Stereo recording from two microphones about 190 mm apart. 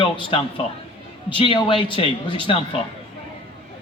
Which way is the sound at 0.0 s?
25° left (ahead or behind).